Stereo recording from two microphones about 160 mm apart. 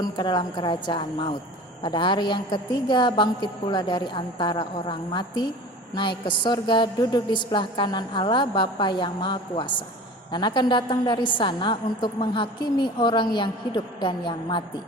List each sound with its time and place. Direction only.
0.0 s a woman's voice: 25° left (ahead or behind)